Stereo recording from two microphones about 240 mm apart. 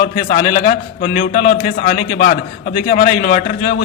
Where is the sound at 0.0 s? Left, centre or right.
Left.